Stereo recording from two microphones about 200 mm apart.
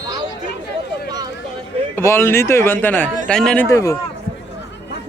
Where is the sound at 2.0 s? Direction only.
10° left (ahead or behind).